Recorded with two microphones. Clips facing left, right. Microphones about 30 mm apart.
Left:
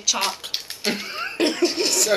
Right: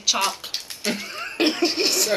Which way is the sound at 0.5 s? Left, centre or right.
Centre.